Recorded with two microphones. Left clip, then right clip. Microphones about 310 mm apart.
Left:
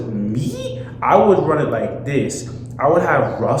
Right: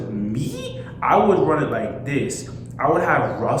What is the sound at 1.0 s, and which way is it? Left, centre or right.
A man's voice, centre.